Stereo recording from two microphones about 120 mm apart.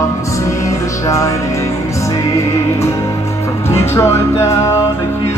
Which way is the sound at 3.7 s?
20° left (ahead or behind).